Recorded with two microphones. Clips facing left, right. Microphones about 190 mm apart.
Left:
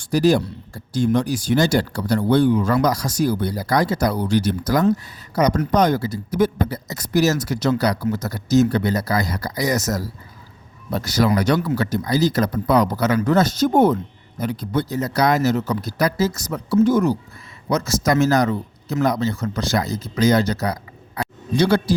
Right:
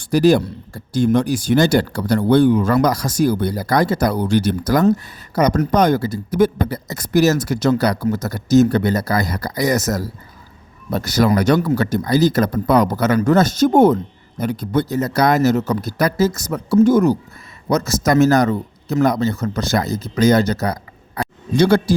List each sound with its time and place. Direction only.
0.0 s speech: 60° right (ahead or behind)